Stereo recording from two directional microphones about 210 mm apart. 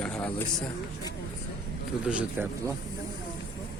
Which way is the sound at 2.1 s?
5° right (ahead or behind).